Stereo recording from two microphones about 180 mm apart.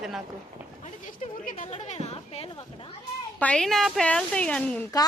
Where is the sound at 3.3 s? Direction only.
5° left (ahead or behind).